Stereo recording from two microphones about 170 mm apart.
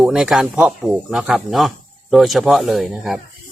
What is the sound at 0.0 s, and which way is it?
Speech, 5° right (ahead or behind).